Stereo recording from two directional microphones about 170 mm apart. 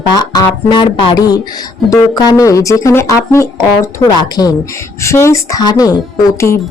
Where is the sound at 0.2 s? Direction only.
20° left (ahead or behind).